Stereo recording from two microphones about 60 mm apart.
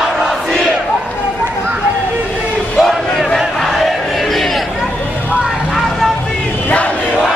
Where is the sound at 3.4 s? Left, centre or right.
Centre.